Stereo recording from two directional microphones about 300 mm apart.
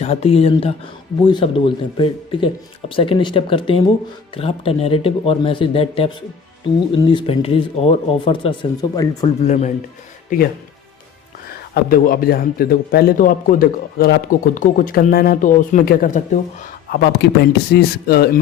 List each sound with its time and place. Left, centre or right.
0.0 s speech: left